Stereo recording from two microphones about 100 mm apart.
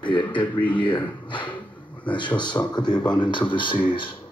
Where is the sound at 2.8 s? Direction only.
50° left (ahead or behind).